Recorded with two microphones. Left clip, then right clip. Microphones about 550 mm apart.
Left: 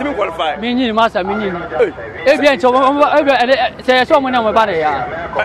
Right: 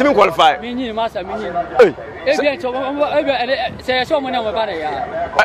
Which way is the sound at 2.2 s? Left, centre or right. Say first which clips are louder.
Left 6 dB; left.